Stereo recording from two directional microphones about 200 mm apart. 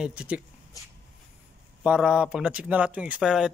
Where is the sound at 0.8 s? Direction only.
20° left (ahead or behind).